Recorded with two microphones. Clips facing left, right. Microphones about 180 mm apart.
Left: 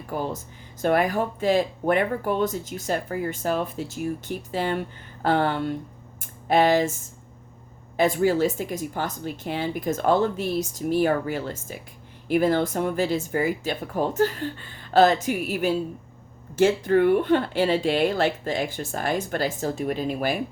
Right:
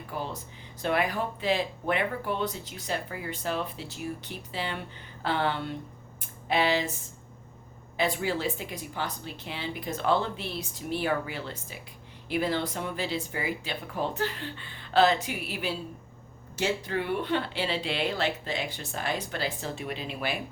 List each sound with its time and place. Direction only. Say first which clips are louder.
0.1 s speech: left 7 dB; 45° left (ahead or behind)
7.9 s speech: left 8 dB; 45° left (ahead or behind)